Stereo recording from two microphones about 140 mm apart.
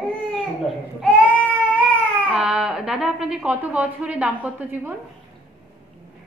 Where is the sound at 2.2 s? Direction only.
5° right (ahead or behind).